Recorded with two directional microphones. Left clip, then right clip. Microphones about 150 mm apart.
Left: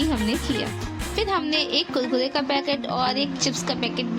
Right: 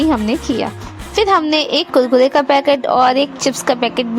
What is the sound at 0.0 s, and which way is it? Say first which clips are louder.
A woman's voice: right 9 dB; 45° right (ahead or behind).